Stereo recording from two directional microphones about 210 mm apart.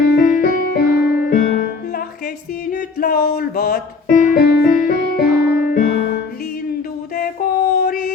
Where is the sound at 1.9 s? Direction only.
45° left (ahead or behind).